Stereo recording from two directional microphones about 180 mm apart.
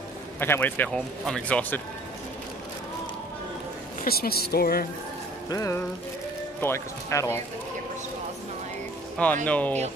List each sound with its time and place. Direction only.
0.4 s speech: 10° left (ahead or behind)
4.0 s speech: 55° left (ahead or behind)
5.5 s speech: 15° left (ahead or behind)
9.2 s speech: 5° left (ahead or behind)